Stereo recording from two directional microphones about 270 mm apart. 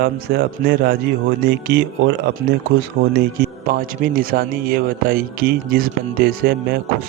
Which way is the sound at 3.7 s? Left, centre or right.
Right.